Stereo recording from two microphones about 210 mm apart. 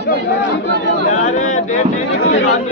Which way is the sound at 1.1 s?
35° left (ahead or behind).